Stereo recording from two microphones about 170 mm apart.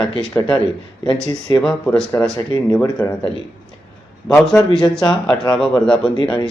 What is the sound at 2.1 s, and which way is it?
Speech, 20° left (ahead or behind).